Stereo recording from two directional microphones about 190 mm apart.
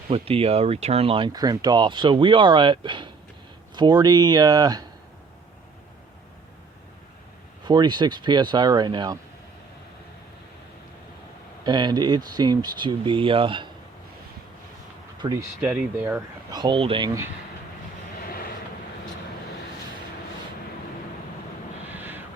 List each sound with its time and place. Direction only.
0.1 s speech: 30° right (ahead or behind)
7.6 s speech: 20° right (ahead or behind)
11.6 s speech: 20° right (ahead or behind)
15.2 s speech: 25° right (ahead or behind)
15.6 s speech: 10° right (ahead or behind)
16.5 s speech: 25° right (ahead or behind)
18.3 s vehicle: 50° left (ahead or behind)
21.9 s vehicle: 10° right (ahead or behind)